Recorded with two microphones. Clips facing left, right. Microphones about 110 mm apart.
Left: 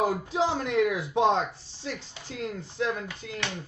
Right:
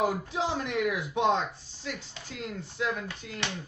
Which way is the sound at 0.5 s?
30° left (ahead or behind).